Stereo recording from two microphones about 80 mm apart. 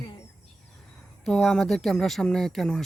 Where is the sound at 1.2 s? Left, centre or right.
Centre.